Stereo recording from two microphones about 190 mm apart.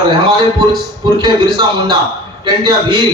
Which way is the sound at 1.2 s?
25° right (ahead or behind).